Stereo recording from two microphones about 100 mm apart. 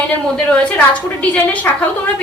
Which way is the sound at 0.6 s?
15° left (ahead or behind).